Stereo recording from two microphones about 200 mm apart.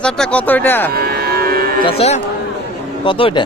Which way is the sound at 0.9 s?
50° right (ahead or behind).